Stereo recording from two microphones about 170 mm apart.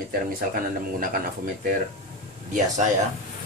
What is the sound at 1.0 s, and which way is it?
Speech, 55° right (ahead or behind).